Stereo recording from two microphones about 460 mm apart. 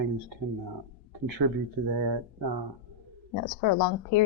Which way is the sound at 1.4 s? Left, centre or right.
Right.